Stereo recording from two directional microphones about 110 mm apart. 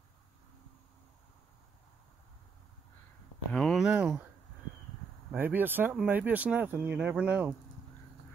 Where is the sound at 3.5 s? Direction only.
Centre (ahead or behind).